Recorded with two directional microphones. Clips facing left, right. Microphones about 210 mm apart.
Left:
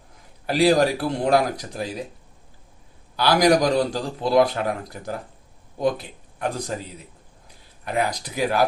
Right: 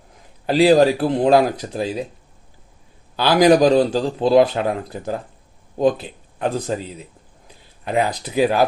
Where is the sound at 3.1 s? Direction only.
20° right (ahead or behind).